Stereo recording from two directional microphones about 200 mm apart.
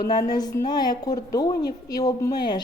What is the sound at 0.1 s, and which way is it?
A woman's voice, 20° left (ahead or behind).